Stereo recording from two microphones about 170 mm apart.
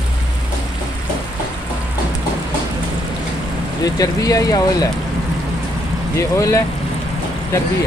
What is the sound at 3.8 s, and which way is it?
Speech, 20° left (ahead or behind).